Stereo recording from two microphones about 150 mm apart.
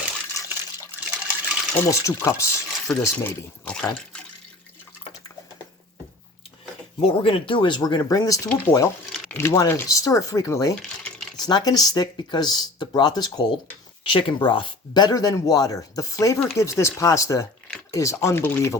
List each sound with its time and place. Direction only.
1.0 s water: 10° right (ahead or behind)
1.7 s speech: 20° left (ahead or behind)
3.9 s water: 5° left (ahead or behind)
7.0 s speech: 40° left (ahead or behind); by 8.9 s 15° left (ahead or behind)
9.1 s a sound: 5° left (ahead or behind)
9.4 s speech: 20° left (ahead or behind)